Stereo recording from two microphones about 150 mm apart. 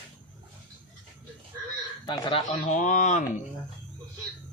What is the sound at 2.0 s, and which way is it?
Speech, 30° left (ahead or behind).